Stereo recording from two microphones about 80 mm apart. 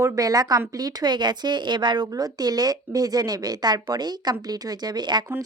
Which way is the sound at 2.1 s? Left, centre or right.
Right.